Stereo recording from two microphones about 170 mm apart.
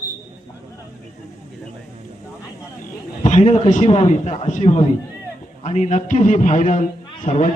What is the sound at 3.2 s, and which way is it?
A man's voice, 45° left (ahead or behind).